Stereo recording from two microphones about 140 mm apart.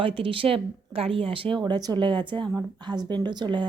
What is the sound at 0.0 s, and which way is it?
A woman's voice, 40° right (ahead or behind).